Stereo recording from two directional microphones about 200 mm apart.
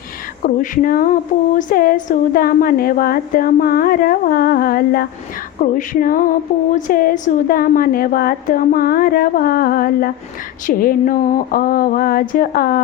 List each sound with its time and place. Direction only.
0.4 s female singing: 40° left (ahead or behind)